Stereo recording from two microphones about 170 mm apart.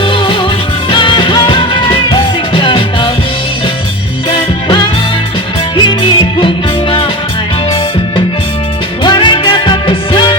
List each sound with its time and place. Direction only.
0.0 s music: 30° left (ahead or behind)
4.3 s music: 30° left (ahead or behind)
9.0 s music: 30° left (ahead or behind)